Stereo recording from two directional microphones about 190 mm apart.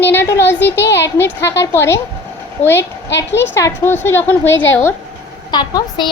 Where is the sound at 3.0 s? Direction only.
70° left (ahead or behind).